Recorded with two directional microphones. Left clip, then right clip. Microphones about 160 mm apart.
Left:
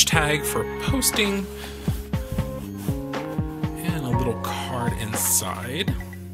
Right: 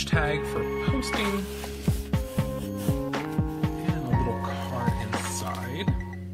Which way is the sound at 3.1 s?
Centre (ahead or behind).